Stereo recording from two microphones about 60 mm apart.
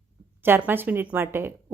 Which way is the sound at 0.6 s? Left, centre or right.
Right.